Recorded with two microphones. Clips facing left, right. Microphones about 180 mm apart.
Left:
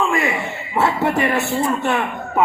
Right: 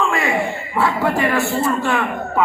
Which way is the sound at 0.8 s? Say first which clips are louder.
Even; 20° left (ahead or behind).